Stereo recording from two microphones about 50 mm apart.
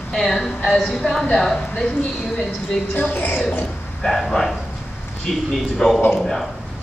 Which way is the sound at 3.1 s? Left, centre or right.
Left.